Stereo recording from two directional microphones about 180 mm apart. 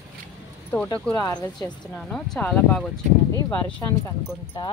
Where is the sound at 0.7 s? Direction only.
20° left (ahead or behind).